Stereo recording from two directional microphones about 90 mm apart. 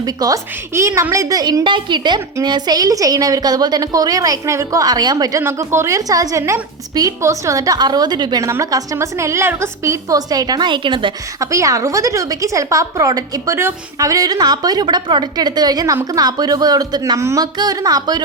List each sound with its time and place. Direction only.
0.0 s a woman's voice: 45° right (ahead or behind)
0.7 s a woman's voice: 30° right (ahead or behind)
5.4 s a woman's voice: 30° right (ahead or behind); by 8.4 s 50° right (ahead or behind)
8.4 s a woman's voice: 35° right (ahead or behind); by 11.1 s 65° right (ahead or behind)
11.3 s a woman's voice: 35° right (ahead or behind)
17.2 s a woman's voice: 30° right (ahead or behind)
17.4 s a woman's voice: 45° right (ahead or behind)